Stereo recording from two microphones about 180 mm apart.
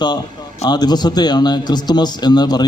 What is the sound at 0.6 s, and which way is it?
A man's voice, 20° left (ahead or behind).